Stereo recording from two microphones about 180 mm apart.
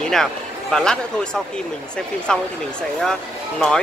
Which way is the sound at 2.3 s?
5° left (ahead or behind).